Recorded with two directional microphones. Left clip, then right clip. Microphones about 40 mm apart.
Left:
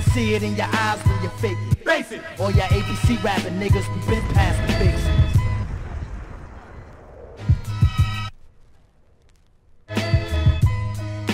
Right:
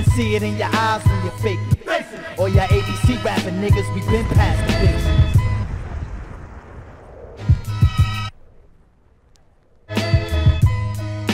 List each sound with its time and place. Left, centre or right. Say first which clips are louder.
0.5 s music: right 3 dB; left
9.8 s music: right 3 dB; left